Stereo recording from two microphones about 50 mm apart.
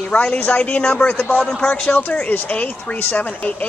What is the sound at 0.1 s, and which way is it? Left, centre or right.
Speech, left.